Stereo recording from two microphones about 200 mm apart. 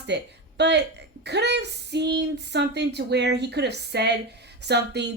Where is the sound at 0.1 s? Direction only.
60° right (ahead or behind).